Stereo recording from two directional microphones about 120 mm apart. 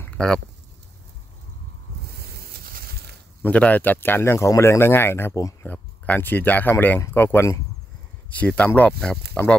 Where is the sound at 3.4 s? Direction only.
10° left (ahead or behind).